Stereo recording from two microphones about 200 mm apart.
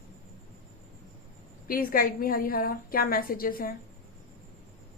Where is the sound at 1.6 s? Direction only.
45° left (ahead or behind).